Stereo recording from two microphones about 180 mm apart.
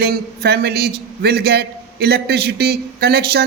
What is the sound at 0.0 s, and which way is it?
A man's voice, 60° right (ahead or behind).